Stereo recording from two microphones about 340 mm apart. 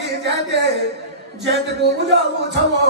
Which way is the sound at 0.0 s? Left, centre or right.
Right.